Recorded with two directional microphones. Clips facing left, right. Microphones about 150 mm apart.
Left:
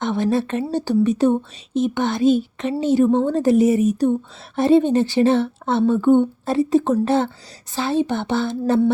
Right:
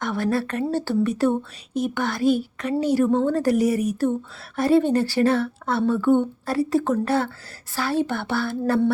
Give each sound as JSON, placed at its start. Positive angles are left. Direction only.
{"t": 0.0, "sound": "speech", "side_deg": 20}